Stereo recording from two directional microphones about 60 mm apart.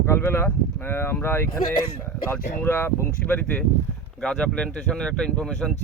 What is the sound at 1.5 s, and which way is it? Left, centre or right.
Speech, left.